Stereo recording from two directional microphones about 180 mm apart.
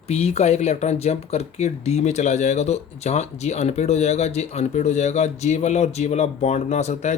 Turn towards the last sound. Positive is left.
turn(degrees=40)  # may be behind; listen again after turning